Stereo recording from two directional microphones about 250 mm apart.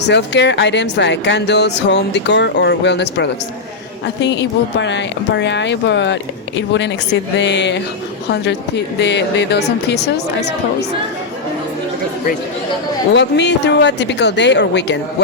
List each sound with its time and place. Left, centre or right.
0.0 s speech: left
13.1 s speech: left